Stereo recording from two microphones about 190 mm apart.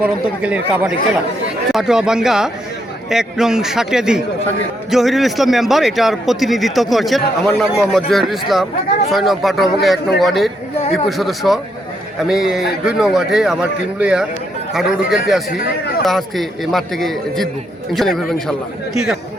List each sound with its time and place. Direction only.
0.0 s a man's voice: 5° right (ahead or behind)
15.5 s speech: 50° left (ahead or behind)
16.0 s a man's voice: centre (ahead or behind)